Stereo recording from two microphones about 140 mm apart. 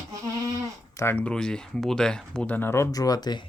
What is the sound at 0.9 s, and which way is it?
Speech, 20° left (ahead or behind).